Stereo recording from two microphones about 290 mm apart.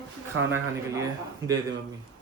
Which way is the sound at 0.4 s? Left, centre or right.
Right.